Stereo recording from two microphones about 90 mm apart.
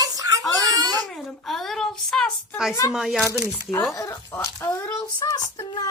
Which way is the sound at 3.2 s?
30° right (ahead or behind).